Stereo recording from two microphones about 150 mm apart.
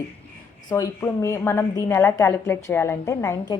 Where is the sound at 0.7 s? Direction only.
20° left (ahead or behind).